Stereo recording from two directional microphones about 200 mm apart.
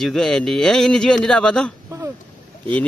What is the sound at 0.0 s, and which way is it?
Speech, centre (ahead or behind).